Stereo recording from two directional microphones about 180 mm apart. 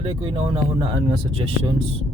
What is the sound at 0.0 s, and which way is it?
Speech, 30° right (ahead or behind).